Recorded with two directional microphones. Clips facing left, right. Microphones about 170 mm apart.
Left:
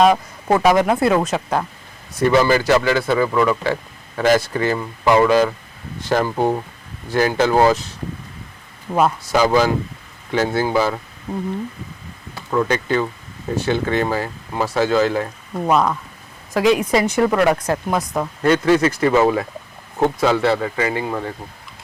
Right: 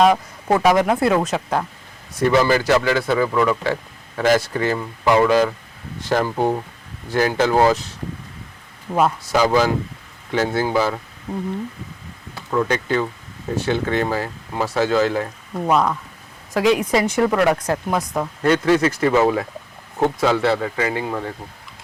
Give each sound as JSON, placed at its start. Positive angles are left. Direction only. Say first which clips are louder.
{"t": 0.0, "sound": "speech", "louder": "left 1 dB", "side_deg": 25}
{"t": 0.9, "sound": "speech", "louder": "left 1 dB", "side_deg": 5}
{"t": 8.9, "sound": "speech", "louder": "left 1 dB", "side_deg": 25}
{"t": 9.2, "sound": "speech", "louder": "left 1 dB", "side_deg": 5}
{"t": 12.6, "sound": "speech", "louder": "left 1 dB", "side_deg": 10}
{"t": 15.6, "sound": "speech", "louder": "left 1 dB", "side_deg": 25}
{"t": 16.6, "sound": "speech", "louder": "left 1 dB", "side_deg": 10}